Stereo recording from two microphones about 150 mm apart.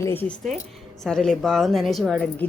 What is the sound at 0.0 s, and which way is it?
Speech, 15° left (ahead or behind).